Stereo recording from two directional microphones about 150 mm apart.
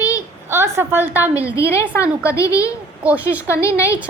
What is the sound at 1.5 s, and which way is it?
A child's voice, 20° left (ahead or behind).